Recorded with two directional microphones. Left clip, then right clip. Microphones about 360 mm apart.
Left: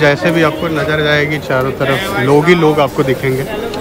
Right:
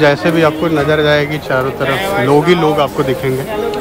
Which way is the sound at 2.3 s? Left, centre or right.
Centre.